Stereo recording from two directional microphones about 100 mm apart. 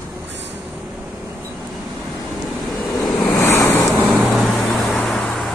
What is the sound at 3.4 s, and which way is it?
Waves, 25° left (ahead or behind).